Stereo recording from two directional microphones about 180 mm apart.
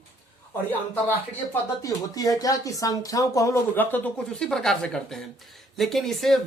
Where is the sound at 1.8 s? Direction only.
20° left (ahead or behind).